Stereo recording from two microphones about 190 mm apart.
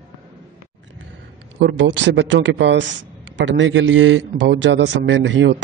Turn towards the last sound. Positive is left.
turn(degrees=-75)  # may be behind; listen again after turning